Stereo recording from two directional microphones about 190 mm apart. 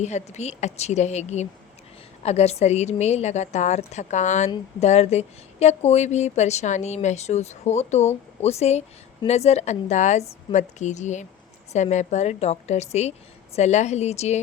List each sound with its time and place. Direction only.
0.0 s speech: 35° left (ahead or behind)